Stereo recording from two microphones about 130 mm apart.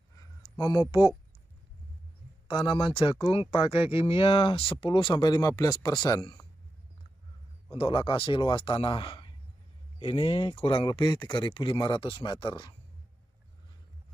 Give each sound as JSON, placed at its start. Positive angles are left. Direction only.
{"t": 0.1, "sound": "a sound", "side_deg": 35}
{"t": 2.4, "sound": "speech", "side_deg": 40}
{"t": 7.7, "sound": "speech", "side_deg": 45}